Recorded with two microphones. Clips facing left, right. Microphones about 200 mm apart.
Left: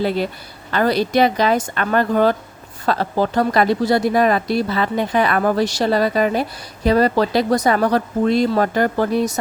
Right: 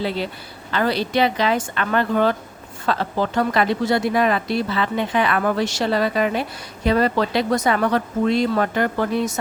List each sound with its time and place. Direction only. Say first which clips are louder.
0.0 s speech: left 4 dB; 45° left (ahead or behind)